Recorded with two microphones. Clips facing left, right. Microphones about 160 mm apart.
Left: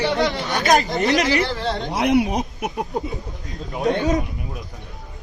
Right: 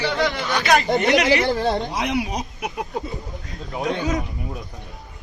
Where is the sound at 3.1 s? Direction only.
Centre (ahead or behind).